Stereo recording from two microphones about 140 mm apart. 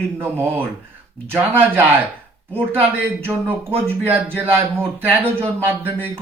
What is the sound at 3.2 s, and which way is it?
Speech, 15° right (ahead or behind).